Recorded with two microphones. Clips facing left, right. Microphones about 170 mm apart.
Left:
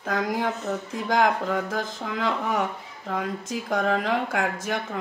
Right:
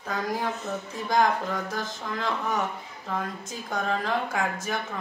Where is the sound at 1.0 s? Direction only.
90° left.